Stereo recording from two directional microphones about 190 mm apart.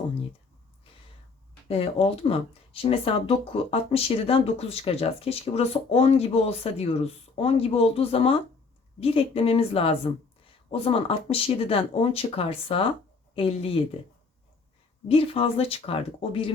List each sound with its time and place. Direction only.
1.6 s speech: 30° left (ahead or behind)
15.0 s speech: 30° left (ahead or behind)